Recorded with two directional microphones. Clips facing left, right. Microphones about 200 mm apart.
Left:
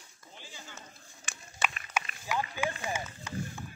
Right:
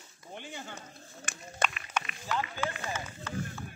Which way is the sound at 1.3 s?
50° right (ahead or behind).